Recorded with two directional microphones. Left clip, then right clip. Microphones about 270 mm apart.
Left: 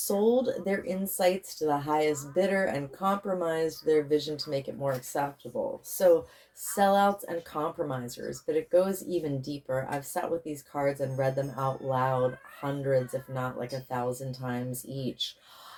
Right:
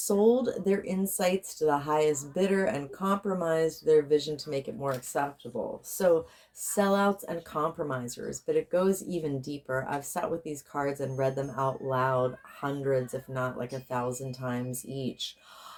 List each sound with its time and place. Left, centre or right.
0.2 s speech: right
6.7 s speech: right